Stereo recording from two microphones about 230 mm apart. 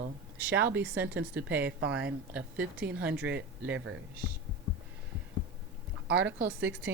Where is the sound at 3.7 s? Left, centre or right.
Right.